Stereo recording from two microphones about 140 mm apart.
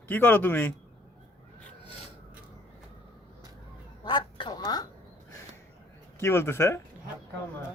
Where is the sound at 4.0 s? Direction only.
35° left (ahead or behind).